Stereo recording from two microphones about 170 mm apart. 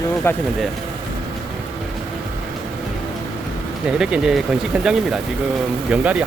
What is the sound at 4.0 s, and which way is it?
Speech, 5° right (ahead or behind).